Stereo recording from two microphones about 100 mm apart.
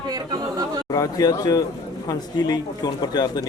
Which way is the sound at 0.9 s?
40° left (ahead or behind).